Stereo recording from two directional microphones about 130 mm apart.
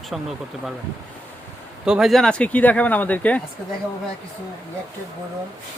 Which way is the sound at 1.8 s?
5° right (ahead or behind).